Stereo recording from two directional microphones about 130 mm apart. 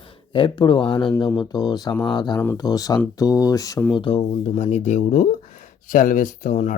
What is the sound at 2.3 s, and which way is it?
Speech, 15° left (ahead or behind).